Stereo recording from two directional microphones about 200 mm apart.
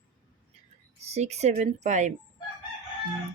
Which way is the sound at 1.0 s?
35° right (ahead or behind).